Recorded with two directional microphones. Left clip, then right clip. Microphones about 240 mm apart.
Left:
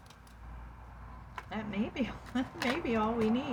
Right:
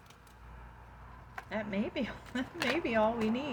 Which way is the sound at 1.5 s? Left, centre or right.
Right.